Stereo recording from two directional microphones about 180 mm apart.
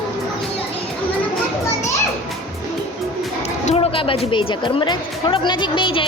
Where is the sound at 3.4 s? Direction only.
40° left (ahead or behind).